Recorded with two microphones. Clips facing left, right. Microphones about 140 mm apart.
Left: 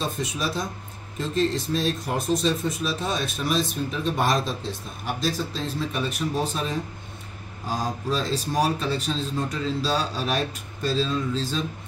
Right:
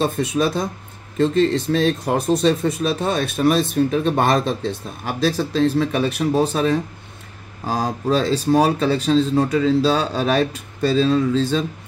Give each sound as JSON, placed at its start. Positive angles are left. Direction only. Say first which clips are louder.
{"t": 0.0, "sound": "speech", "louder": "right 9 dB", "side_deg": -60}